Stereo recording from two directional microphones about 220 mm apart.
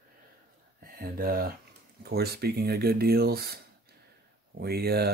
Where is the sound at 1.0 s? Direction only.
40° right (ahead or behind).